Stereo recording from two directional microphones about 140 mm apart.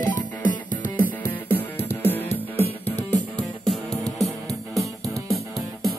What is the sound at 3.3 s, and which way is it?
Music, 5° left (ahead or behind).